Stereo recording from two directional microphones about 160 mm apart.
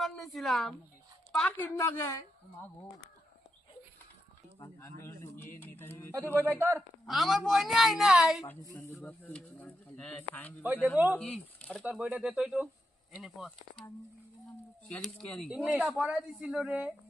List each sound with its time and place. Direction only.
0.0 s a woman's voice: centre (ahead or behind); by 2.2 s 15° left (ahead or behind)
4.6 s speech: 20° left (ahead or behind)
6.3 s speech: 15° right (ahead or behind)
7.1 s speech: centre (ahead or behind)
8.7 s speech: 15° left (ahead or behind)
10.9 s speech: 10° right (ahead or behind)
11.2 s speech: 5° left (ahead or behind)
11.9 s speech: 10° right (ahead or behind)
14.8 s speech: 5° left (ahead or behind)